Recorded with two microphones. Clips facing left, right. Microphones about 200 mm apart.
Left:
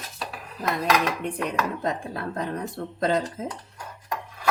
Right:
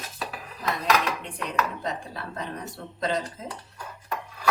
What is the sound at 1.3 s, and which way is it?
Speech, 50° left (ahead or behind).